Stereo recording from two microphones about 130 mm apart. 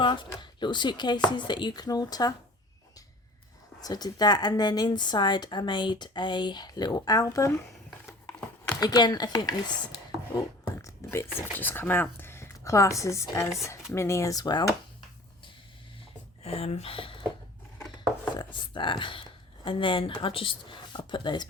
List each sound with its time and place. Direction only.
0.0 s a woman's voice: 35° left (ahead or behind)
3.8 s a woman's voice: 30° left (ahead or behind)
8.8 s a woman's voice: 35° left (ahead or behind)
16.4 s speech: 50° left (ahead or behind)
18.3 s a woman's voice: 35° left (ahead or behind)